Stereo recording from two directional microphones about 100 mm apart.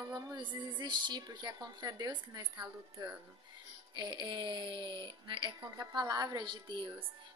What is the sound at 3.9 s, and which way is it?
A woman's voice, 45° right (ahead or behind).